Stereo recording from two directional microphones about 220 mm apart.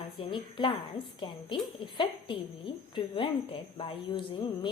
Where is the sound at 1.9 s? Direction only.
20° left (ahead or behind).